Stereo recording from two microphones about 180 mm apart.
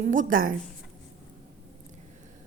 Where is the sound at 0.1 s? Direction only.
50° right (ahead or behind).